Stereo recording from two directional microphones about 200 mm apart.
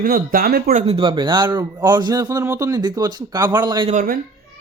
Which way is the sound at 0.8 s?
25° right (ahead or behind).